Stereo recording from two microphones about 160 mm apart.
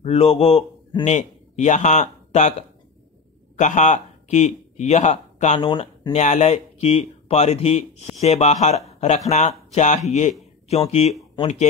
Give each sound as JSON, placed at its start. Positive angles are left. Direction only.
{"t": 0.0, "sound": "a man's voice", "side_deg": 40}
{"t": 3.5, "sound": "speech", "side_deg": 50}
{"t": 5.6, "sound": "speech", "side_deg": 30}
{"t": 6.1, "sound": "speech", "side_deg": 45}